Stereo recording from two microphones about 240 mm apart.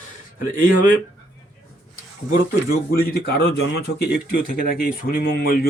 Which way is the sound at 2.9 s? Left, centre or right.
Left.